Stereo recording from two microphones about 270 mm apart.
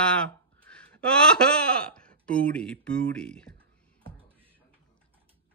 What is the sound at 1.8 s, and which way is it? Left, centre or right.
Speech, centre.